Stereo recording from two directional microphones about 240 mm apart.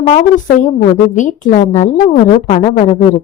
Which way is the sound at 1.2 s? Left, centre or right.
Left.